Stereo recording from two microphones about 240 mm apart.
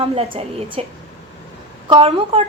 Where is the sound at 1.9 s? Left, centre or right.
Right.